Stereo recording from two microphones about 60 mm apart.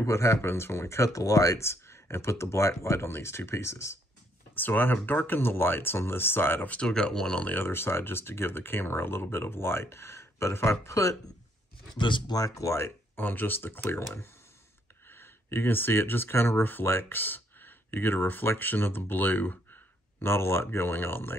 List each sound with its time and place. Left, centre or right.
0.0 s speech: left
1.6 s speech: left
4.6 s speech: left
6.9 s speech: centre
7.4 s speech: left
12.4 s speech: left
12.7 s speech: left